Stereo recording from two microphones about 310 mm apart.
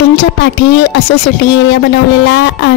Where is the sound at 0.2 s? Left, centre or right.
Left.